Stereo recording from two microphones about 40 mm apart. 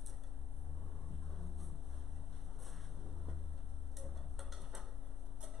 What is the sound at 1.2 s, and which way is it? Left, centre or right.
Vehicle, centre.